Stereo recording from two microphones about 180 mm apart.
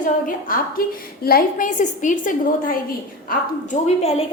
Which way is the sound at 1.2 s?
55° left (ahead or behind).